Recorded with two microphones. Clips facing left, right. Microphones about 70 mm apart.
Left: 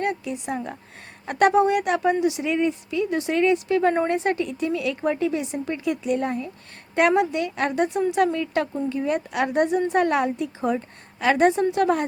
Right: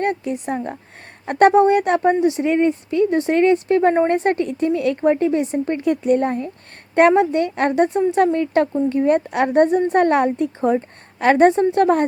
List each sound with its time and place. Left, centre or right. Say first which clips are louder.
0.0 s a woman's voice: right 5 dB; right
4.1 s a woman's voice: right 5 dB; right